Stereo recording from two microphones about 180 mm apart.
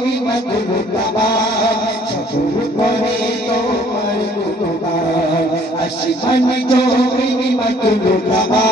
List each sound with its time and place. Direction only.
1.3 s music: 70° left (ahead or behind)
6.2 s a man's voice: 65° left (ahead or behind)